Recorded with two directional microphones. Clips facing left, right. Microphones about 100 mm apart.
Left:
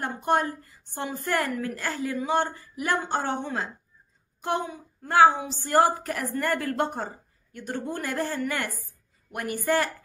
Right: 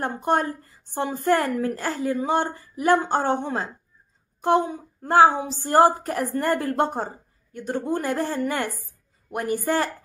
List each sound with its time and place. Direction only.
0.0 s a woman's voice: 30° right (ahead or behind)